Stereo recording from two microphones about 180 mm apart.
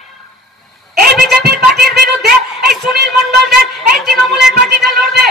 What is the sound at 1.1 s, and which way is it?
Speech, centre (ahead or behind).